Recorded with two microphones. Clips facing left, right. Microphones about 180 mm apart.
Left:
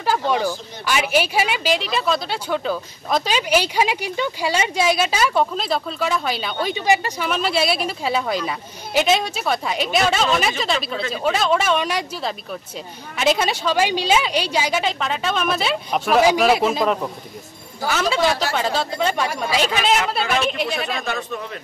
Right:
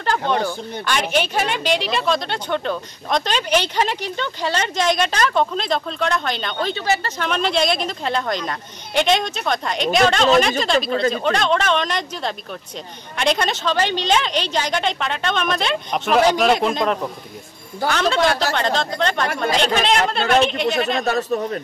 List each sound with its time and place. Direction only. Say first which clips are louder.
0.0 s a woman's voice: even; 5° left (ahead or behind)
21.0 s speech: right 7 dB; 40° right (ahead or behind)